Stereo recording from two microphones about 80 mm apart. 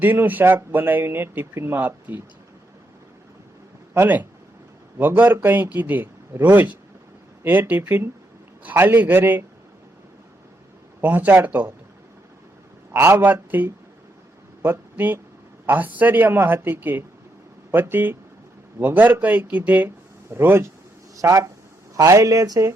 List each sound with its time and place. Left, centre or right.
0.0 s speech: right
3.9 s speech: right
11.0 s speech: right
12.9 s speech: right
21.2 s speech: right